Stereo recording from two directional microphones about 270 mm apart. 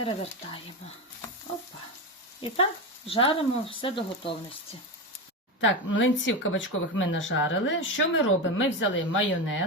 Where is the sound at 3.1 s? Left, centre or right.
Centre.